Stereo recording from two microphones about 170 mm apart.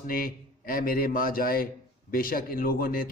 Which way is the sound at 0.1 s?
55° left (ahead or behind).